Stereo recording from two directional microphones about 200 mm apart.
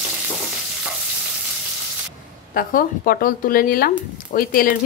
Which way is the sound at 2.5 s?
45° left (ahead or behind).